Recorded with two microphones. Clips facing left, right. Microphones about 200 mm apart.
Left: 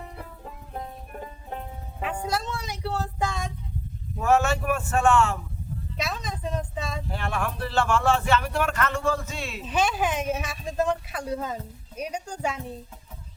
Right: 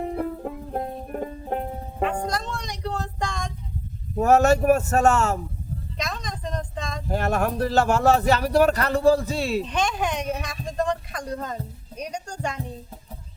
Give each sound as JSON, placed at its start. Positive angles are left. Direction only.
{"t": 0.0, "sound": "music", "side_deg": -55}
{"t": 2.2, "sound": "music", "side_deg": 5}
{"t": 4.2, "sound": "speech", "side_deg": -40}
{"t": 6.0, "sound": "speech", "side_deg": 5}
{"t": 7.1, "sound": "speech", "side_deg": -40}
{"t": 9.6, "sound": "speech", "side_deg": 5}